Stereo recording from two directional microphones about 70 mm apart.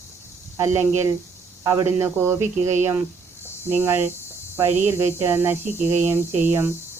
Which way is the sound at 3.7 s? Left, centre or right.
Right.